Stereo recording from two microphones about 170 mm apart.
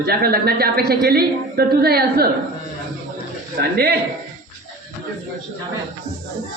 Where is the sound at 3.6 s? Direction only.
65° right (ahead or behind).